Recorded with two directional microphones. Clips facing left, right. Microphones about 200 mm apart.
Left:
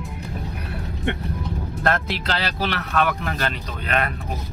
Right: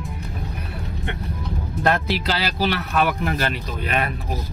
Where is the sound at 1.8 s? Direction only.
5° right (ahead or behind).